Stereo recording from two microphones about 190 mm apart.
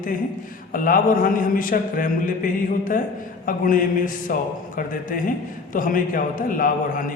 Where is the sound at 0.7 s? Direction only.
45° left (ahead or behind).